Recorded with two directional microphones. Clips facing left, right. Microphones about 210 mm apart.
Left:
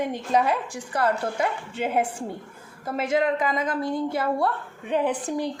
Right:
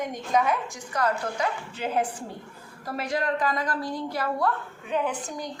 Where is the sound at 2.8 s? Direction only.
20° left (ahead or behind).